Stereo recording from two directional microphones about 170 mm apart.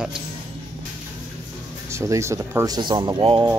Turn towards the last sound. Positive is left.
turn(degrees=-30)  # may be behind; listen again after turning